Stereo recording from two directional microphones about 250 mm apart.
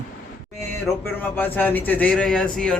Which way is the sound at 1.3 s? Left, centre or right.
Centre.